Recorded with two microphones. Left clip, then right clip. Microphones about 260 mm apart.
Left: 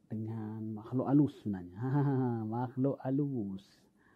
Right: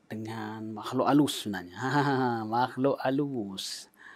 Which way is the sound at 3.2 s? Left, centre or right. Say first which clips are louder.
Right 4 dB; right.